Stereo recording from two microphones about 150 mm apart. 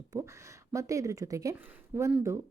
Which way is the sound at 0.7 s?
20° right (ahead or behind).